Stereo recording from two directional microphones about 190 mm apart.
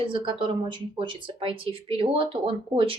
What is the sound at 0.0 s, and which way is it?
Speech, 25° right (ahead or behind).